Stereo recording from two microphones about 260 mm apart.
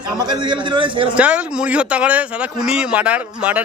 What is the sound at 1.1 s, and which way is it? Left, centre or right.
Speech, centre.